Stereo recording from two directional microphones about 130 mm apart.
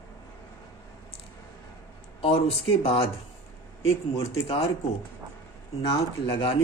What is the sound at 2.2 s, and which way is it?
Speech, 45° left (ahead or behind).